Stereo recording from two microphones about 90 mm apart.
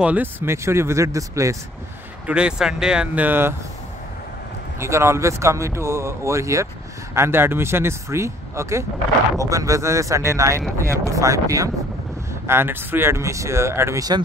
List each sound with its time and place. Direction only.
0.0 s speech: 20° right (ahead or behind); by 1.6 s 35° right (ahead or behind)
2.2 s speech: 10° right (ahead or behind)
3.3 s speech: 25° right (ahead or behind)
4.7 s speech: 30° right (ahead or behind)
12.4 s speech: 25° right (ahead or behind)